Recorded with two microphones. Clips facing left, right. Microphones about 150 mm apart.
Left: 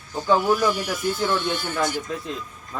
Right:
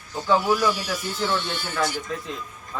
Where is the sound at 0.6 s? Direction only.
50° left (ahead or behind).